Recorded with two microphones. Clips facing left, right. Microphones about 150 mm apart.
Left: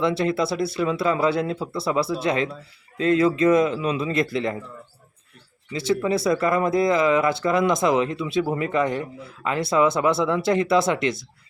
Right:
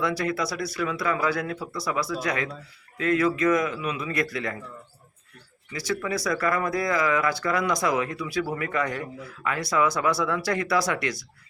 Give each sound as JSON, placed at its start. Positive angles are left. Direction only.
{"t": 0.0, "sound": "speech", "side_deg": 25}
{"t": 5.7, "sound": "speech", "side_deg": 25}